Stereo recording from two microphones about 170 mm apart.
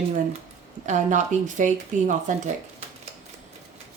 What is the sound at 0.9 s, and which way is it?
Speech, 45° right (ahead or behind).